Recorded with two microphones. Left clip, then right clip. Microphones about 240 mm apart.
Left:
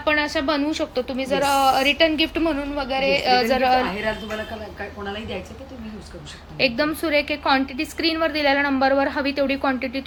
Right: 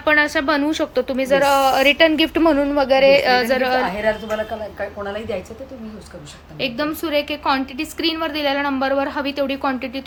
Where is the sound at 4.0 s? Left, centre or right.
Right.